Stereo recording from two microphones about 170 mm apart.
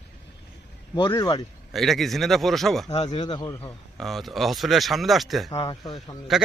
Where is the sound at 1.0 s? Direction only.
25° left (ahead or behind).